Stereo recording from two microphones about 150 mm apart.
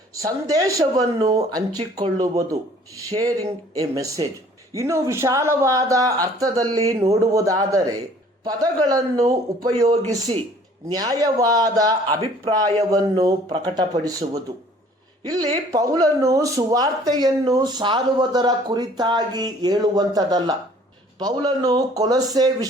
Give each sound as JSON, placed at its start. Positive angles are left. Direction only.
{"t": 0.1, "sound": "speech", "side_deg": -20}